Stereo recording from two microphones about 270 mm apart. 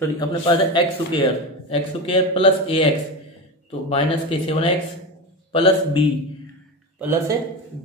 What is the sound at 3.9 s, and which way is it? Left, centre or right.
A man's voice, left.